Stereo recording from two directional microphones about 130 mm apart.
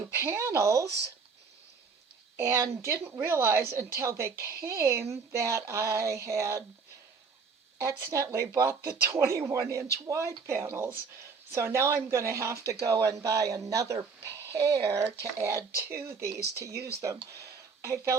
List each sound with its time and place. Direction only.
0.0 s speech: 20° right (ahead or behind)
2.3 s a woman's voice: 20° right (ahead or behind)
7.8 s a woman's voice: 20° right (ahead or behind)
17.4 s a sound: 20° right (ahead or behind)